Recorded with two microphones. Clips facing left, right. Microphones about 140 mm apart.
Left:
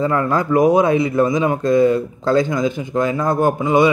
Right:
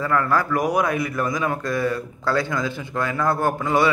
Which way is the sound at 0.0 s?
20° left (ahead or behind).